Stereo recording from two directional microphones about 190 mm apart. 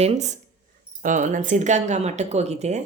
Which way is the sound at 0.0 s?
35° right (ahead or behind).